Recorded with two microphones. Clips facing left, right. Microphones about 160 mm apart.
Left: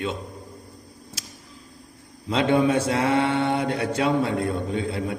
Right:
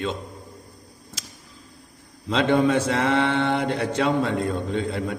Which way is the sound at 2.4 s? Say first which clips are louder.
Even; 10° left (ahead or behind).